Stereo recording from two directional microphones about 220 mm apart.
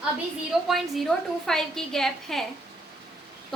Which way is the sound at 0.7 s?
Centre (ahead or behind).